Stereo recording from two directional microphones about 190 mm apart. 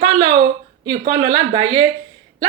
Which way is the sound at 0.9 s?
30° right (ahead or behind).